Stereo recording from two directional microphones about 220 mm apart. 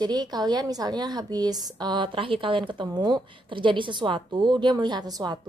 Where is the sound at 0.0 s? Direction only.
20° right (ahead or behind).